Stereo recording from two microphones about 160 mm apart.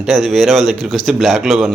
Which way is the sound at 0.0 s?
Centre (ahead or behind).